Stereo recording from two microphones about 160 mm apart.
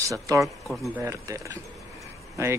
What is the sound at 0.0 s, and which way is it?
Speech, 20° right (ahead or behind).